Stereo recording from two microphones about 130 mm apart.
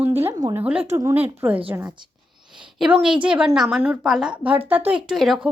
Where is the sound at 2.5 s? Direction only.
5° right (ahead or behind).